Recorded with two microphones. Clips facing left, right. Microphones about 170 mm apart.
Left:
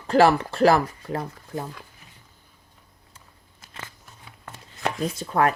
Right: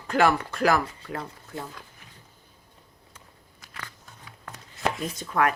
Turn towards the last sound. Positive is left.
turn(degrees=30)  # may be behind; listen again after turning